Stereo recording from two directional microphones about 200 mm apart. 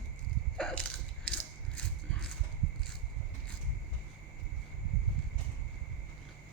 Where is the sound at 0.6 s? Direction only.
5° left (ahead or behind).